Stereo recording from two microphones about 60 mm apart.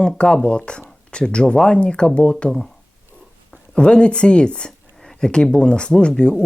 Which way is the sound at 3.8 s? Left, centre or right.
Centre.